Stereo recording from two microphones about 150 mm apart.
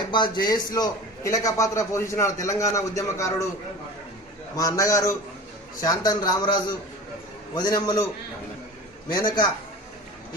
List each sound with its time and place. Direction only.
0.1 s a man's voice: 30° left (ahead or behind)
4.6 s a man's voice: 20° left (ahead or behind)
9.1 s a man's voice: 30° left (ahead or behind)